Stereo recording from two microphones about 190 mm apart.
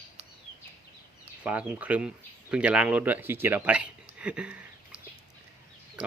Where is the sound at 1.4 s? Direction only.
5° right (ahead or behind).